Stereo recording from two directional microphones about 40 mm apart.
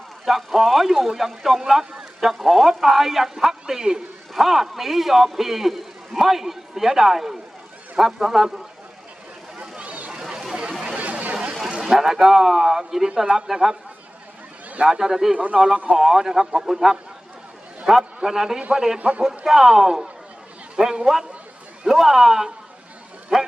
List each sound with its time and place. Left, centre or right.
0.3 s a man's voice: centre
1.8 s speech: right
2.2 s a man's voice: centre
4.4 s a man's voice: centre
9.7 s a sound: right
10.1 s a sound: centre
10.8 s a sound: right
11.7 s vehicle: centre
11.9 s a man's voice: centre
14.8 s a man's voice: centre
18.9 s a man's voice: right
19.5 s a man's voice: centre
21.0 s a man's voice: centre